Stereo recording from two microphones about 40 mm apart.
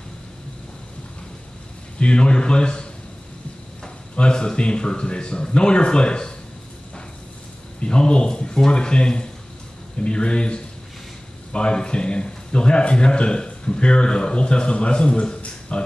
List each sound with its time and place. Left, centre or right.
2.0 s a man's voice: left
4.2 s a man's voice: left
7.8 s a man's voice: left